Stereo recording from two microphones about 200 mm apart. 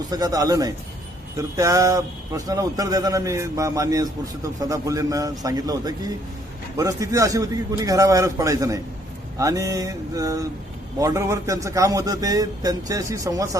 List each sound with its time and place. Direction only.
0.1 s a man's voice: 20° right (ahead or behind)